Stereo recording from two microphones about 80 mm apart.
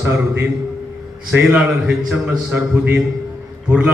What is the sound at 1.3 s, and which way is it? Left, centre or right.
A man's voice, centre.